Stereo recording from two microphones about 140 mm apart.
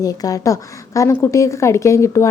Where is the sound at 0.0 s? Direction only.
25° left (ahead or behind).